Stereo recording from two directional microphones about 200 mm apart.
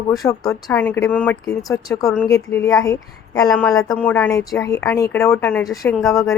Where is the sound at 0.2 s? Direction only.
15° left (ahead or behind).